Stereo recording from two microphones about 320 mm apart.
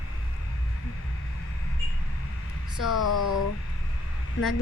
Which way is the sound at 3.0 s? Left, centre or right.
Left.